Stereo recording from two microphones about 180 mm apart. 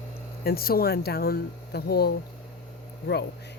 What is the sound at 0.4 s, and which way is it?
Speech, 55° left (ahead or behind).